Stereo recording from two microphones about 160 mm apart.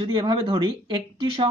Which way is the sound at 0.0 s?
30° right (ahead or behind).